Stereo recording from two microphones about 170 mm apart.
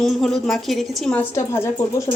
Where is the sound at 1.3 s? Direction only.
15° left (ahead or behind).